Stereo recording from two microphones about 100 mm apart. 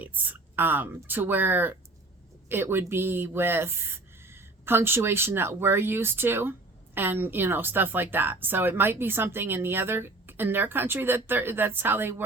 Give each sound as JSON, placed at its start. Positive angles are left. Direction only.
{"t": 0.0, "sound": "speech", "side_deg": -15}